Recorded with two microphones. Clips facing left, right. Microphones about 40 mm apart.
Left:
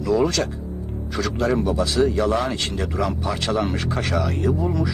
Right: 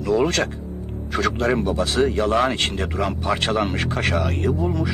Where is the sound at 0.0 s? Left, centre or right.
Right.